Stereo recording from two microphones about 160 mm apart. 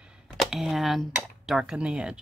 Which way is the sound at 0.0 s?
5° right (ahead or behind).